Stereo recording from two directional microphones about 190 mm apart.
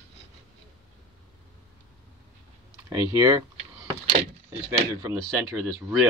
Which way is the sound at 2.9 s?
15° right (ahead or behind).